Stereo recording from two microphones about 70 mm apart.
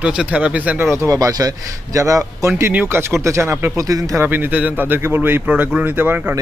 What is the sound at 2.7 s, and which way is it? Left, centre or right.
Speech, right.